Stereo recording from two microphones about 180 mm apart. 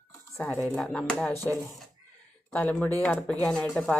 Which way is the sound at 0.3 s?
10° left (ahead or behind).